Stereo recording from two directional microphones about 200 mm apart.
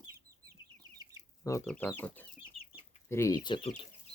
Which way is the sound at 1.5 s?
15° left (ahead or behind).